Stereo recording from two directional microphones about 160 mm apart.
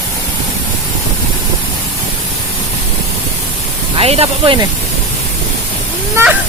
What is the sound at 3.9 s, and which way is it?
Speech, 40° right (ahead or behind).